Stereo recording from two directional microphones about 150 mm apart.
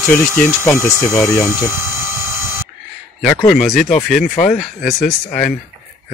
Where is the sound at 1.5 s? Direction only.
15° right (ahead or behind).